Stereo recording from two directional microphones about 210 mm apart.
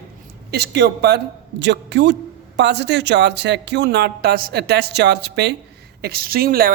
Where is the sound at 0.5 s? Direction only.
50° right (ahead or behind).